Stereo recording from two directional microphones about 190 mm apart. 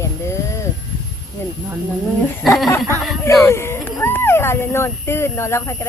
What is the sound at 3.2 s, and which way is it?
Speech, 15° left (ahead or behind).